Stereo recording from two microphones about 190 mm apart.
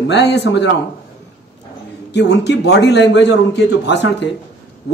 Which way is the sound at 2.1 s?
65° left (ahead or behind).